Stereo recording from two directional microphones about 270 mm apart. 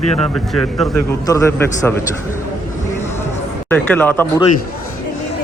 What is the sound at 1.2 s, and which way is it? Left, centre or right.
Speech, centre.